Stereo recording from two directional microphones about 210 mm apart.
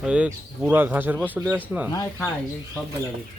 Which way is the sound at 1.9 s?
15° left (ahead or behind).